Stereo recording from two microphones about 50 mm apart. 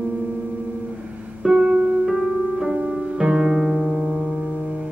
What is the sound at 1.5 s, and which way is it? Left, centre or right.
Music, right.